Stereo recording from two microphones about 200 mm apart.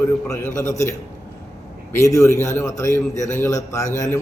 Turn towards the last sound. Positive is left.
turn(degrees=15)  # may be behind; listen again after turning